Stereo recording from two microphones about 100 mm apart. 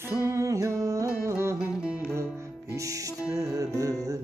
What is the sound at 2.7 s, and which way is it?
Music, 35° right (ahead or behind).